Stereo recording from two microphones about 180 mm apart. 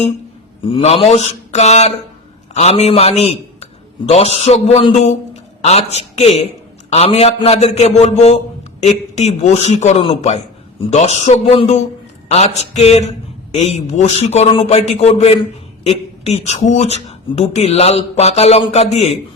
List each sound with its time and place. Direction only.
0.6 s a man's voice: 35° left (ahead or behind)